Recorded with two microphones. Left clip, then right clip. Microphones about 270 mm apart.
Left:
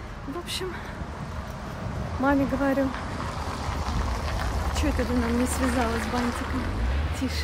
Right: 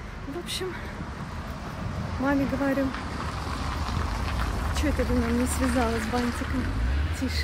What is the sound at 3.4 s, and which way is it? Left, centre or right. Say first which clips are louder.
Vehicle: left 1 dB; left.